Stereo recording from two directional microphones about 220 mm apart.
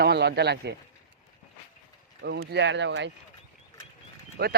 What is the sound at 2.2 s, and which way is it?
Speech, 50° right (ahead or behind).